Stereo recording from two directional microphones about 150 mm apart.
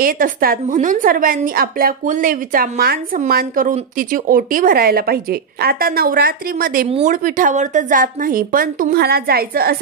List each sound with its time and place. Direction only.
0.0 s a woman's voice: 70° right (ahead or behind)
6.9 s a woman's voice: 50° right (ahead or behind); by 9.8 s 85° right